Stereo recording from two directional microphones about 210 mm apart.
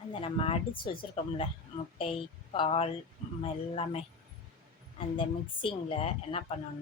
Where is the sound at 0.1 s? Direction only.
25° left (ahead or behind).